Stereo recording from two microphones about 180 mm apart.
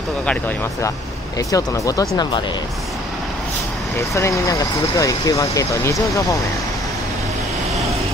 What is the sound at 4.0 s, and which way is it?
Speech, 15° left (ahead or behind).